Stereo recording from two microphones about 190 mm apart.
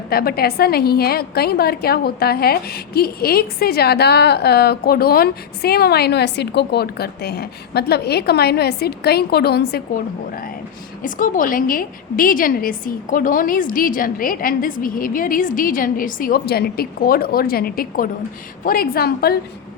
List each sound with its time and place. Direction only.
0.1 s a woman's voice: 55° left (ahead or behind)
11.0 s a woman's voice: 45° left (ahead or behind)